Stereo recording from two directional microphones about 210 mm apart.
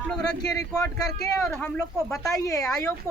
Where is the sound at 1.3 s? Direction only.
10° left (ahead or behind).